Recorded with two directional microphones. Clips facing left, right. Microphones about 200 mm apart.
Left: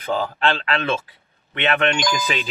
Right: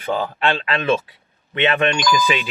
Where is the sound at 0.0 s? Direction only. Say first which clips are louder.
Right 1 dB; 10° right (ahead or behind).